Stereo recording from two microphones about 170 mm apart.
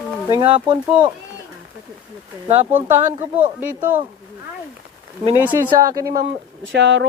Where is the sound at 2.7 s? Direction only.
10° right (ahead or behind).